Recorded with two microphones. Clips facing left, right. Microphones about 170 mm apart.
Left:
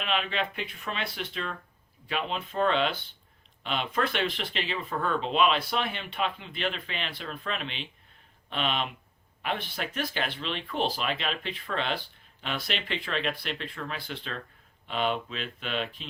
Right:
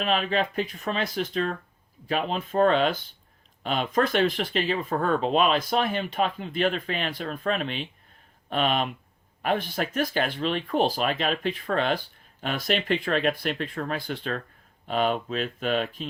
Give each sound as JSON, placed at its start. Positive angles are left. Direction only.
{"t": 0.0, "sound": "speech", "side_deg": -40}